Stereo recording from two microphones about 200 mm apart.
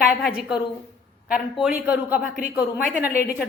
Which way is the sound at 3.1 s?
50° left (ahead or behind).